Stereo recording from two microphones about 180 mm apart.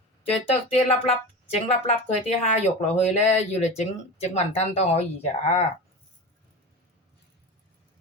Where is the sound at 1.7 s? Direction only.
40° left (ahead or behind).